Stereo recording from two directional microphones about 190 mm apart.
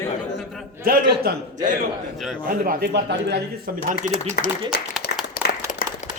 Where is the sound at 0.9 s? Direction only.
50° right (ahead or behind).